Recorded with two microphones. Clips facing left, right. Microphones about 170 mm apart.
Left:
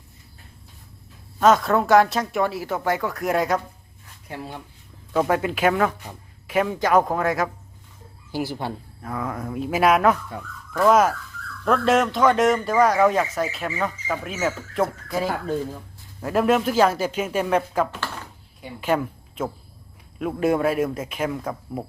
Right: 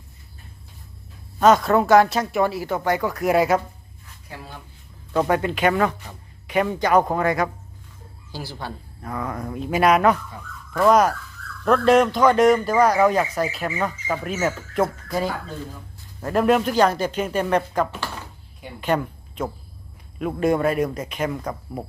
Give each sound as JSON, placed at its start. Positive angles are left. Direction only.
{"t": 1.4, "sound": "a man's voice", "side_deg": 0}
{"t": 4.3, "sound": "speech", "side_deg": 25}
{"t": 5.1, "sound": "a man's voice", "side_deg": 5}
{"t": 8.3, "sound": "speech", "side_deg": 20}
{"t": 9.0, "sound": "a man's voice", "side_deg": 0}
{"t": 17.9, "sound": "a sound", "side_deg": -10}
{"t": 18.8, "sound": "a man's voice", "side_deg": 5}